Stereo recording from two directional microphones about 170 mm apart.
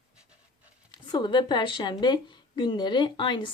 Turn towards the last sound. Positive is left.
turn(degrees=30)  # may be behind; listen again after turning